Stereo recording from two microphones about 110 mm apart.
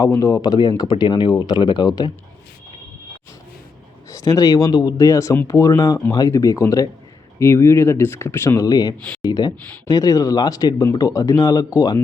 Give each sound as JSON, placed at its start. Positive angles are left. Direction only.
{"t": 0.0, "sound": "speech", "side_deg": 30}
{"t": 4.1, "sound": "speech", "side_deg": 30}
{"t": 9.0, "sound": "speech", "side_deg": 10}
{"t": 9.2, "sound": "speech", "side_deg": 35}